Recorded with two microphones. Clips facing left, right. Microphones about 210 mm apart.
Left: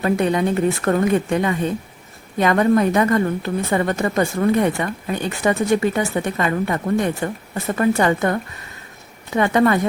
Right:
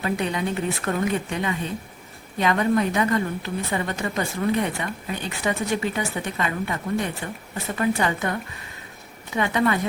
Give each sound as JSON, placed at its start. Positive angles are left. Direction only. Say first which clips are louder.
{"t": 0.0, "sound": "a woman's voice", "louder": "left 7 dB", "side_deg": 50}